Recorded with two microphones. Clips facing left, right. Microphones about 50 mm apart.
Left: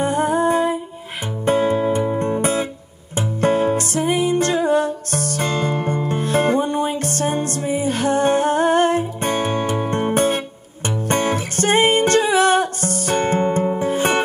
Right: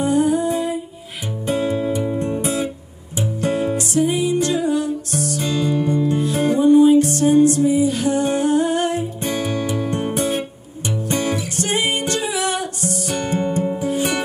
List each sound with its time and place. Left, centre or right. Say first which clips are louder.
0.0 s humming: even; left
1.4 s music: left 3 dB; left